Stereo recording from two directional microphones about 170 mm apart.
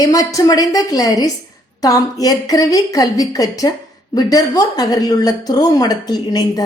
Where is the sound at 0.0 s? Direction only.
20° left (ahead or behind).